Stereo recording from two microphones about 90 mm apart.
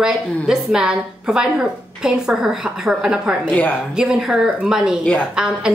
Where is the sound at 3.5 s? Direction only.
15° left (ahead or behind).